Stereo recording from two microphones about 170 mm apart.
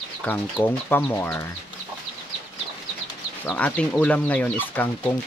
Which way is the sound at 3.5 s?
10° left (ahead or behind).